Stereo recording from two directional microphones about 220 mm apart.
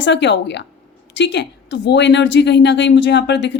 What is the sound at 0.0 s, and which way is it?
A woman's voice, 55° left (ahead or behind).